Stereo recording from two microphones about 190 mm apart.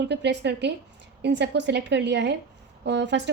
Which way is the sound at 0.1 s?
65° right (ahead or behind).